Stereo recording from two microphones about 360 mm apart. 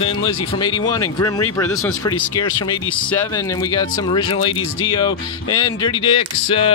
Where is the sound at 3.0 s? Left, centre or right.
Centre.